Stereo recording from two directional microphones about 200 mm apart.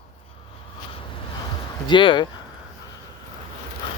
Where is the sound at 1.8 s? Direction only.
25° left (ahead or behind).